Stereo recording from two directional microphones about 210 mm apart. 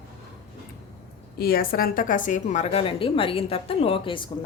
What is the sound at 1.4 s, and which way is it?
A woman's voice, 45° left (ahead or behind).